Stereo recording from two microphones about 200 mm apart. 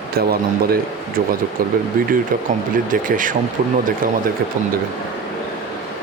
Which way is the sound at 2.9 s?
40° right (ahead or behind).